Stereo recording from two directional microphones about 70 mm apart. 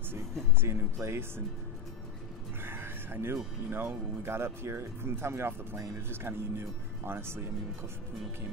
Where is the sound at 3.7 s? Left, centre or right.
Right.